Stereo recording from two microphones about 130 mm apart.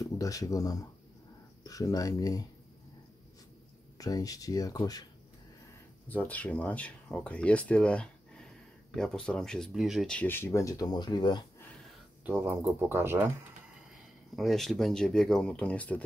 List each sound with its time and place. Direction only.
0.0 s speech: 25° left (ahead or behind)
4.0 s speech: 25° left (ahead or behind)
6.0 s speech: 10° left (ahead or behind); by 11.4 s 35° left (ahead or behind)
12.3 s speech: 15° right (ahead or behind)
14.3 s speech: centre (ahead or behind)